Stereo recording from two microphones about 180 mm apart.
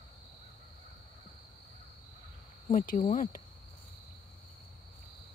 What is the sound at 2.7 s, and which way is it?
Speech, 50° left (ahead or behind).